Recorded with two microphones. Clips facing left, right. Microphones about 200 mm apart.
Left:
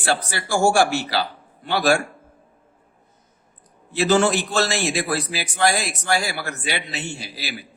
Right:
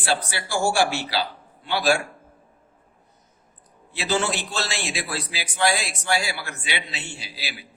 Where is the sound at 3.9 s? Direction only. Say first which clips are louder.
Left 7 dB; 50° left (ahead or behind).